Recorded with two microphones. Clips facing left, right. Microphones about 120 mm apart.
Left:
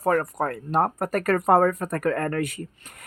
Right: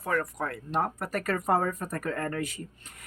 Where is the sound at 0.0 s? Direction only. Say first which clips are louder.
Left 7 dB; 45° left (ahead or behind).